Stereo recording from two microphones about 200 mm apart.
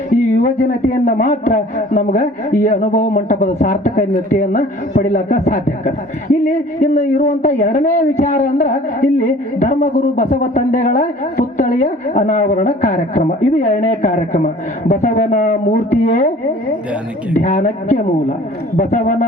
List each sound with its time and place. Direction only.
0.1 s a man's voice: 35° left (ahead or behind)
17.3 s a man's voice: 35° left (ahead or behind)